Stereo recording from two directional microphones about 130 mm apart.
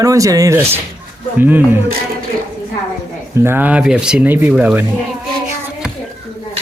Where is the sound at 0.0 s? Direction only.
25° right (ahead or behind).